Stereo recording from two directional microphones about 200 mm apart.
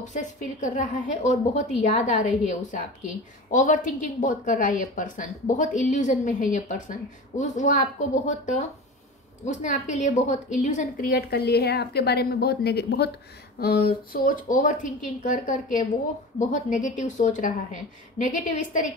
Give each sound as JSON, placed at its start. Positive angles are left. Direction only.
{"t": 0.0, "sound": "a woman's voice", "side_deg": 40}